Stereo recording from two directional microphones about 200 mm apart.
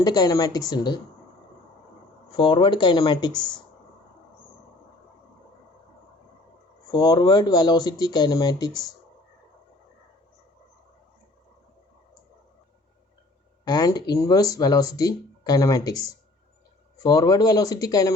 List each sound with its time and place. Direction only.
0.0 s speech: 20° left (ahead or behind)
2.3 s speech: 25° left (ahead or behind)
6.9 s speech: 20° left (ahead or behind)
13.7 s speech: 20° left (ahead or behind)